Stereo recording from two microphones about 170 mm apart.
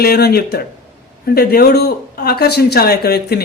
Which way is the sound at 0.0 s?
65° left (ahead or behind).